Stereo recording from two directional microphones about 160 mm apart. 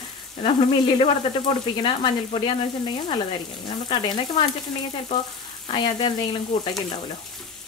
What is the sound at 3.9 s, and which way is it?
Sizzle, 30° left (ahead or behind).